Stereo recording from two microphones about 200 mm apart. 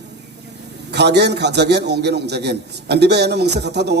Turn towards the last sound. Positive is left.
turn(degrees=-55)  # may be behind; listen again after turning